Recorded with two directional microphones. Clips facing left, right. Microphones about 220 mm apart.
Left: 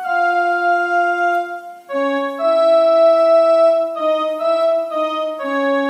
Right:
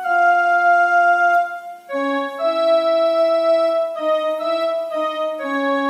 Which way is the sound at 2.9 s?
55° left (ahead or behind).